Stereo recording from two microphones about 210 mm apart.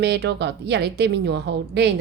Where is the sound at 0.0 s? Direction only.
55° right (ahead or behind).